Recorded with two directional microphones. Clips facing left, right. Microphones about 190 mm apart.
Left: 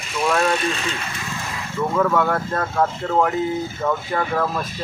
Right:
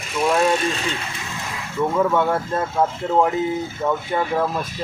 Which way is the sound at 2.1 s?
20° right (ahead or behind).